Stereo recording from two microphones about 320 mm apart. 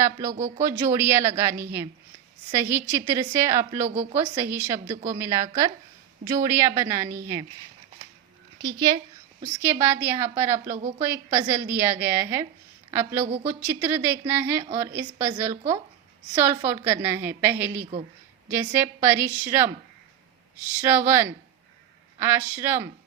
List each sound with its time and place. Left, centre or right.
0.0 s a woman's voice: centre
0.3 s speech: right
0.6 s a woman's voice: centre
8.5 s a woman's voice: centre
10.8 s speech: centre
11.0 s a woman's voice: centre
13.2 s speech: centre
13.5 s a woman's voice: centre
20.8 s a woman's voice: centre